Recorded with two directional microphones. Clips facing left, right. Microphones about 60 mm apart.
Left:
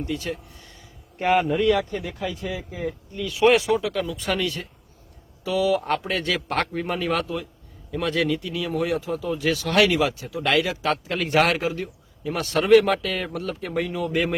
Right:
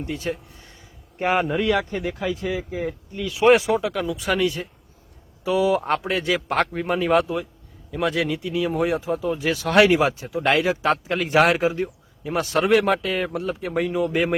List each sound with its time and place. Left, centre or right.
0.0 s speech: right
1.2 s speech: centre
3.5 s speech: right
3.9 s speech: centre
7.1 s speech: centre
8.4 s speech: right
11.2 s speech: centre